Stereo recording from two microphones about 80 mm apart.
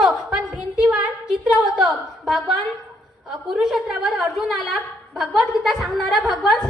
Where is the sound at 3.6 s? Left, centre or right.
Centre.